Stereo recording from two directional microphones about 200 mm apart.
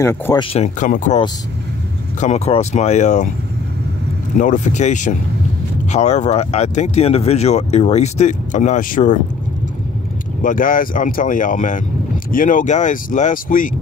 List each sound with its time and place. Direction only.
0.0 s speech: 15° left (ahead or behind)
0.4 s speech: 30° left (ahead or behind)
4.4 s speech: 35° left (ahead or behind)
10.4 s speech: 45° left (ahead or behind)